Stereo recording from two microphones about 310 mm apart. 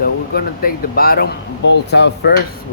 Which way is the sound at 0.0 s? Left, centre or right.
Left.